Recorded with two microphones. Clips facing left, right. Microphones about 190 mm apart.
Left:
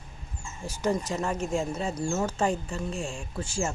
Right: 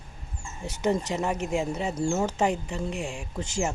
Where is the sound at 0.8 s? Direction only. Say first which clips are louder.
Right 2 dB; 20° right (ahead or behind).